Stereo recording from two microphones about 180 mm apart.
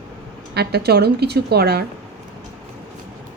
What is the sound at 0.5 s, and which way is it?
A woman's voice, 65° right (ahead or behind).